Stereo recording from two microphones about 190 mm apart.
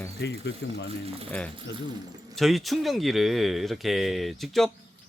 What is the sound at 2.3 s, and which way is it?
Speech, centre (ahead or behind).